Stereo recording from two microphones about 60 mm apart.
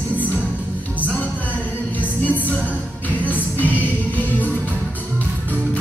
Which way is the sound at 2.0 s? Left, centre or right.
Left.